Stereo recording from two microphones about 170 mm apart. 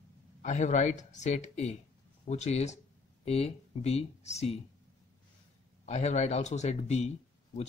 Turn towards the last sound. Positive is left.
turn(degrees=40)  # may be behind; listen again after turning